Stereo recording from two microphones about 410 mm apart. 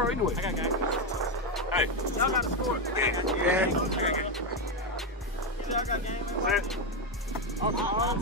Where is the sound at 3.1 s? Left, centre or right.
Centre.